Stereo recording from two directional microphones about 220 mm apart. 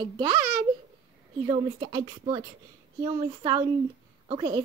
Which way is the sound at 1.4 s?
20° right (ahead or behind).